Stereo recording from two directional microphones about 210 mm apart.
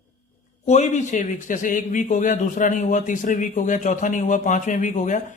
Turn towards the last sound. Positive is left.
turn(degrees=35)  # may be behind; listen again after turning